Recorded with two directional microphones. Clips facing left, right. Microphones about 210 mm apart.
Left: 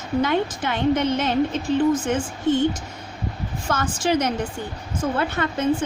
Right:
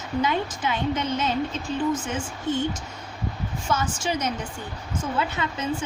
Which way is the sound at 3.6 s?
55° left (ahead or behind).